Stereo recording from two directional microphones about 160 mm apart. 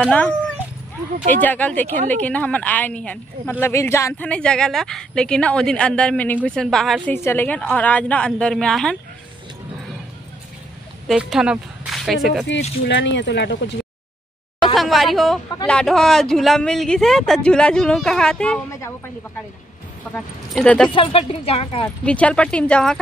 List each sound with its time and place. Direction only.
0.0 s speech: 10° left (ahead or behind)
1.3 s speech: 10° left (ahead or behind)
7.2 s speech: 15° left (ahead or behind)
11.1 s speech: 5° right (ahead or behind)
12.8 s speech: 90° left
14.6 s speech: centre (ahead or behind)
18.7 s speech: 20° left (ahead or behind)
20.5 s speech: 5° left (ahead or behind)
20.9 s speech: 35° left (ahead or behind)
21.8 s speech: 10° left (ahead or behind)